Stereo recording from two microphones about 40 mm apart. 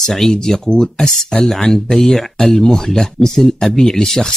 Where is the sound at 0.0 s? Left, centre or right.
Centre.